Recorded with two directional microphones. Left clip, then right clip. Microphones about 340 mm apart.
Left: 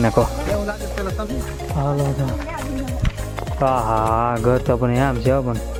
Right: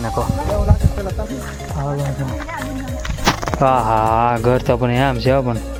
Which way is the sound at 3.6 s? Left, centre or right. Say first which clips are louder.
Right 3 dB; centre.